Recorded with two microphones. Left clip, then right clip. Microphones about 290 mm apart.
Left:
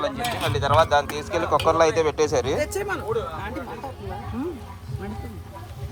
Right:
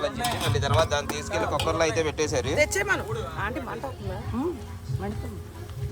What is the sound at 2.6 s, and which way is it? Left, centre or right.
Speech, right.